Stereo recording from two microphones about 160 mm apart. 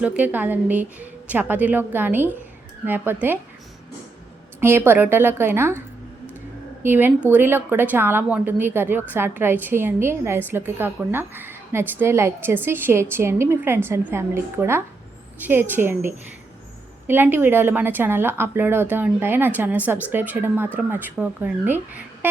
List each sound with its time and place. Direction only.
0.0 s a woman's voice: 10° right (ahead or behind)
4.6 s a woman's voice: 15° right (ahead or behind)
6.8 s a woman's voice: 15° right (ahead or behind)
17.1 s a woman's voice: 15° right (ahead or behind)